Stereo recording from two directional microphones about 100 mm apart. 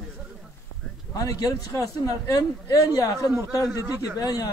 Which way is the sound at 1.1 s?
35° left (ahead or behind).